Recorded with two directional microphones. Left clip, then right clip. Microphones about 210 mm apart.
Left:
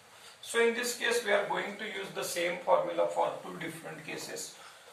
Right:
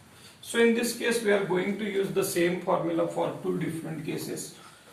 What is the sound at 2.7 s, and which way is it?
Speech, 35° right (ahead or behind).